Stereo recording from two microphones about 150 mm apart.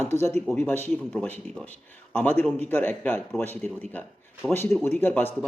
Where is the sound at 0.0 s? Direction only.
15° left (ahead or behind).